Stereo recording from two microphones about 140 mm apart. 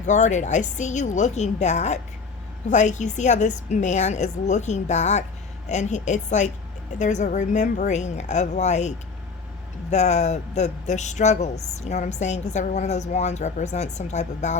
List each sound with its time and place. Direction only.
0.0 s speech: 60° left (ahead or behind)
9.9 s speech: 55° left (ahead or behind)